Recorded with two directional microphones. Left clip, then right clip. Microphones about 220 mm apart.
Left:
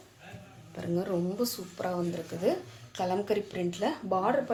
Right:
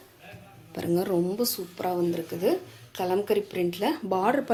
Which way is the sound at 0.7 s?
45° right (ahead or behind).